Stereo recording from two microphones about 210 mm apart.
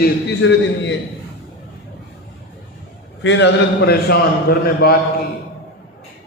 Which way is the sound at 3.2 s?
55° left (ahead or behind).